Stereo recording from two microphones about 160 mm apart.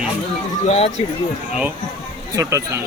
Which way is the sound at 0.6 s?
45° left (ahead or behind).